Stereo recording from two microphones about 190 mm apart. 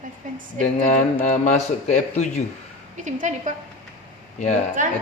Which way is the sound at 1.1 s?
40° left (ahead or behind).